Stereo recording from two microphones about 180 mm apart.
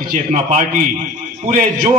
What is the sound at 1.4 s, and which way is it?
Speech, 30° right (ahead or behind).